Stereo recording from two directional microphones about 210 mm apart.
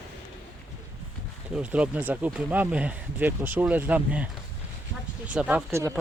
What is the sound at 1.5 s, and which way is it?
Speech, 5° right (ahead or behind).